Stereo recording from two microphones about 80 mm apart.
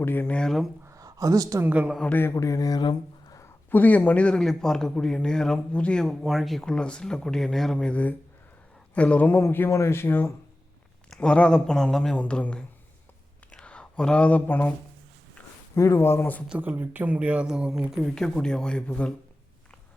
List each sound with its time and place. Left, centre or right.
0.0 s speech: left
0.9 s a sound: right
1.6 s speech: centre
2.0 s speech: left
2.3 s mantra: left
3.7 s a man's voice: left
9.4 s speech: left
11.1 s a man's voice: centre
12.1 s a man's voice: centre
15.7 s speech: left
16.6 s speech: right
18.1 s a man's voice: centre